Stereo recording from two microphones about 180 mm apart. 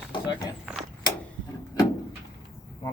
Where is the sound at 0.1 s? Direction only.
25° left (ahead or behind).